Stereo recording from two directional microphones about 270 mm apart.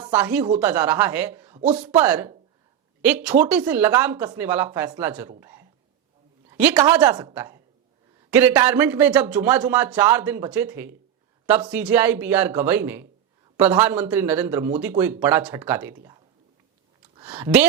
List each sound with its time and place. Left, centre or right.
0.2 s speech: centre
1.5 s speech: right
1.9 s speech: centre
5.4 s a sound: centre
6.5 s a woman's voice: centre
7.0 s speech: centre